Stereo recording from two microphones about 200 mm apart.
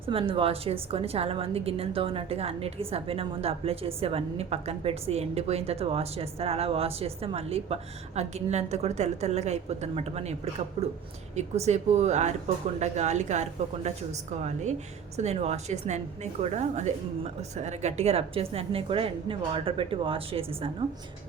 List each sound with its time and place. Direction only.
0.0 s a woman's voice: 25° right (ahead or behind)